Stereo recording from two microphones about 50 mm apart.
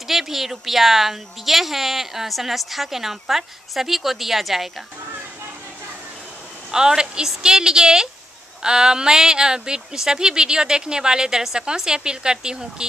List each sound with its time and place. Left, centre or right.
0.1 s a woman's voice: centre
6.7 s speech: centre